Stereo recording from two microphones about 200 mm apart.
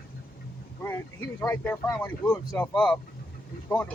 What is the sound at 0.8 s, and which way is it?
Speech, 10° left (ahead or behind).